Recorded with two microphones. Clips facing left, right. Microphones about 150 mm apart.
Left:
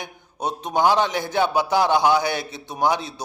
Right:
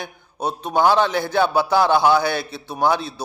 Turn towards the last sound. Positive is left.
turn(degrees=20)  # may be behind; listen again after turning